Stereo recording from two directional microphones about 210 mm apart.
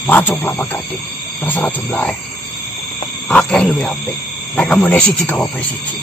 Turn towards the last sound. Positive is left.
turn(degrees=5)  # may be behind; listen again after turning